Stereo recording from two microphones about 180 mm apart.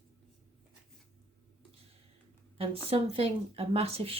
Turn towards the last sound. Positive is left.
turn(degrees=-35)  # may be behind; listen again after turning